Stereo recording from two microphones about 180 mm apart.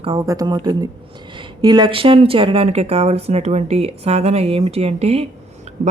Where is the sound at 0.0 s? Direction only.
25° right (ahead or behind).